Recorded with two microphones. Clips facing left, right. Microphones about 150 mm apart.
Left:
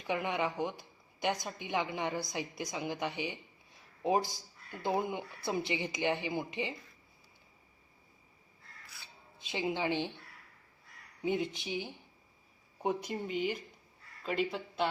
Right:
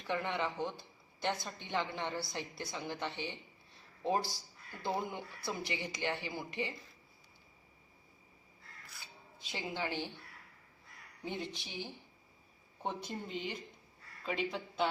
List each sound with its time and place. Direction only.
0.1 s a woman's voice: 15° left (ahead or behind)
9.4 s speech: 20° left (ahead or behind)
11.2 s a woman's voice: 20° left (ahead or behind); by 14.8 s 5° left (ahead or behind)